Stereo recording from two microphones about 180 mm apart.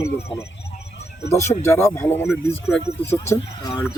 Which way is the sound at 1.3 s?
15° left (ahead or behind).